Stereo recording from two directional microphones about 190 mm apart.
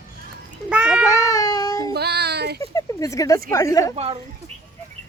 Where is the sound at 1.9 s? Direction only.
60° right (ahead or behind).